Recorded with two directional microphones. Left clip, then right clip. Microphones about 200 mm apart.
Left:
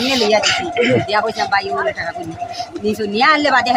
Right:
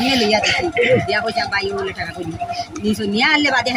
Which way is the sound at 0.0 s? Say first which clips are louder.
Left 1 dB; 60° left (ahead or behind).